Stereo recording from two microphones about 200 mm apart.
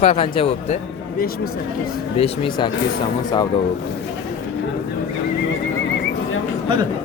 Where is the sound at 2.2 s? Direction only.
30° left (ahead or behind).